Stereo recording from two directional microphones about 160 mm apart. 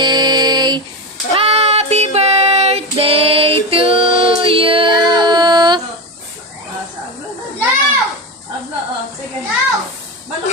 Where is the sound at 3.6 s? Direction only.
35° right (ahead or behind).